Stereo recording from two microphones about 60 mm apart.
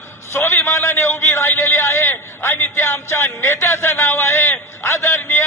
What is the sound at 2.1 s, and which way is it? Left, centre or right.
A man's voice, left.